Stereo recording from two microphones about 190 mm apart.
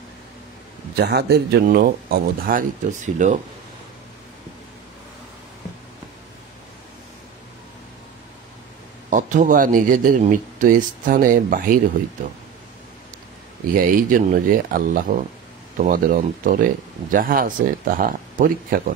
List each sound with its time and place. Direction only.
0.9 s speech: 60° right (ahead or behind); by 3.3 s 40° right (ahead or behind)
9.1 s speech: 40° right (ahead or behind)
13.7 s speech: 45° right (ahead or behind)